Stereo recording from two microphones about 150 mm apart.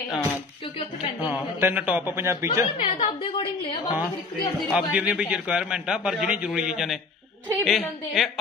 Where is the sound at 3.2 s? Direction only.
35° left (ahead or behind).